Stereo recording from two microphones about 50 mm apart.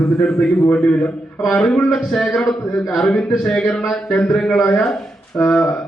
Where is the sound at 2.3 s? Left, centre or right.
Centre.